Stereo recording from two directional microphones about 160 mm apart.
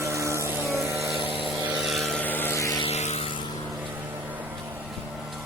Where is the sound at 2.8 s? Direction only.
45° left (ahead or behind).